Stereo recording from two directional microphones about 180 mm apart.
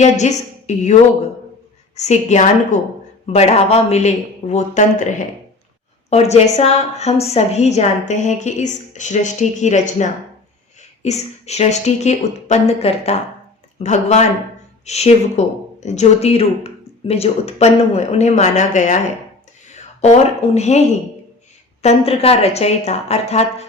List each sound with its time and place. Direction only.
0.0 s a woman's voice: 40° left (ahead or behind)
2.0 s speech: 40° left (ahead or behind)